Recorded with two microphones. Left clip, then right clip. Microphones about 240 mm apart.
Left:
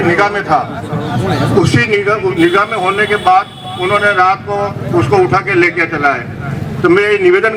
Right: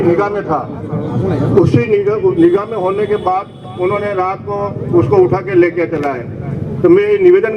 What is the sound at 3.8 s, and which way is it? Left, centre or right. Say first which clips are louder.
A man's voice: left 5 dB; left.